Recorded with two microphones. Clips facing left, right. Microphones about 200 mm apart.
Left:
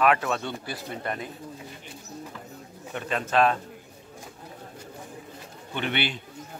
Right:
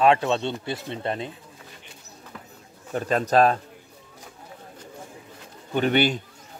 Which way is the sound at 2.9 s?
40° right (ahead or behind).